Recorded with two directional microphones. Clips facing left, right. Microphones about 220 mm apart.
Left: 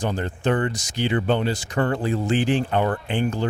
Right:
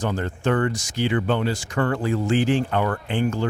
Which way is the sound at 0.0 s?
15° left (ahead or behind).